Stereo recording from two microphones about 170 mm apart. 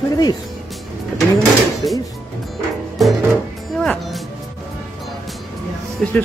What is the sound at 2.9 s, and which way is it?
Music, centre (ahead or behind).